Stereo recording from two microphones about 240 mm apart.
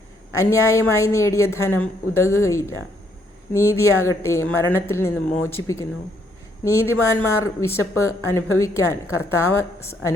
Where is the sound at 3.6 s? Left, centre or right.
Left.